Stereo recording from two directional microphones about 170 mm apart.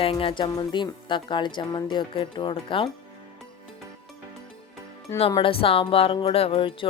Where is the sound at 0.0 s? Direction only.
35° left (ahead or behind).